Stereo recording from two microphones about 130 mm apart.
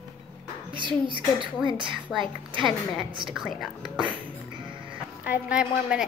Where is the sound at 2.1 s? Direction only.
5° right (ahead or behind).